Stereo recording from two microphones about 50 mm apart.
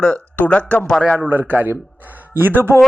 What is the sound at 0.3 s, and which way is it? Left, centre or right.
Speech, left.